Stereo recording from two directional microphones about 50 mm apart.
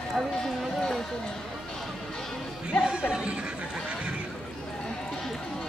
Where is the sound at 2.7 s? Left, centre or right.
Centre.